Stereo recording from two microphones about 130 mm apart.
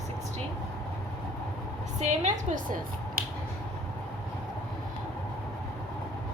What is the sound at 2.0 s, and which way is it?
Speech, 70° right (ahead or behind).